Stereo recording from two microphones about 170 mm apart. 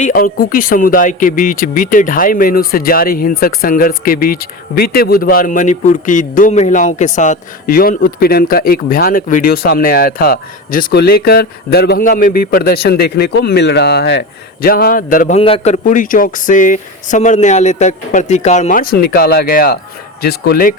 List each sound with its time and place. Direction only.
0.0 s speech: 55° left (ahead or behind)
15.4 s speech: 35° left (ahead or behind); by 20.7 s 60° left (ahead or behind)